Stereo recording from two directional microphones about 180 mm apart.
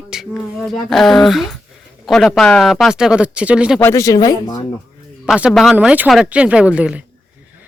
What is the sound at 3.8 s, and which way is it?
Speech, 15° left (ahead or behind).